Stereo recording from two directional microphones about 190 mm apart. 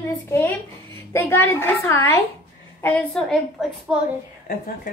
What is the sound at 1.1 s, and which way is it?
A woman's voice, 15° left (ahead or behind).